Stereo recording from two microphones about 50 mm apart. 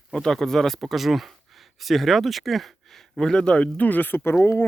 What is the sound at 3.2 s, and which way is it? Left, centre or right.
Speech, centre.